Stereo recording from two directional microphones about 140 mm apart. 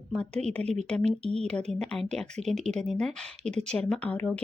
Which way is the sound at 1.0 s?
50° right (ahead or behind).